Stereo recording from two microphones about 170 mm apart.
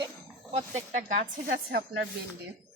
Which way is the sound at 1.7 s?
70° right (ahead or behind).